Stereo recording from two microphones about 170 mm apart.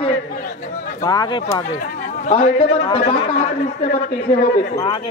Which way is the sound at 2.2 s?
40° left (ahead or behind).